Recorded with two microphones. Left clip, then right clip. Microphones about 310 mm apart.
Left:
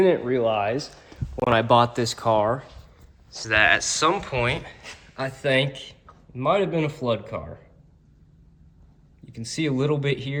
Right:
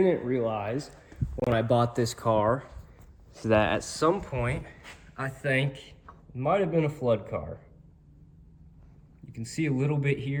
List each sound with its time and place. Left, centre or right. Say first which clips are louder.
0.0 s speech: left 6 dB; centre
0.8 s a sound: left 4 dB; centre
1.5 s speech: left 7 dB; centre
3.4 s speech: left 4 dB; centre
3.7 s speech: left 6 dB; centre
9.6 s speech: left 6 dB; centre